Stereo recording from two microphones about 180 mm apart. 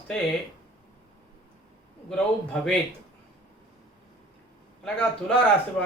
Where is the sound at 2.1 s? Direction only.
5° left (ahead or behind).